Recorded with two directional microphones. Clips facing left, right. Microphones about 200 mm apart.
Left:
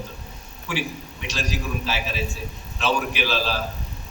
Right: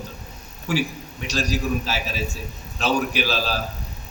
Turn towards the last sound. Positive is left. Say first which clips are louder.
# right 1 dB
turn(degrees=-40)  # may be behind; listen again after turning